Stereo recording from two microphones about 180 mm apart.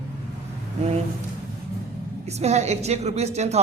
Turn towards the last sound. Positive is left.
turn(degrees=-35)  # may be behind; listen again after turning